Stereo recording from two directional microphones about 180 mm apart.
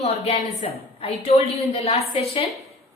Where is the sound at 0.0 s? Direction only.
35° left (ahead or behind).